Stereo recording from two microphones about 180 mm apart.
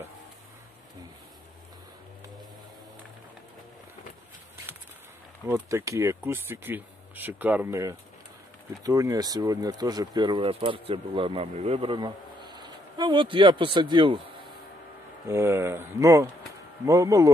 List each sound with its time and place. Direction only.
5.5 s speech: 15° right (ahead or behind)
15.2 s speech: 15° right (ahead or behind)